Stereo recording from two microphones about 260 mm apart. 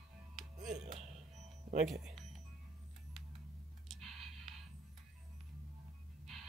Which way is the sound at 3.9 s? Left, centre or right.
Centre.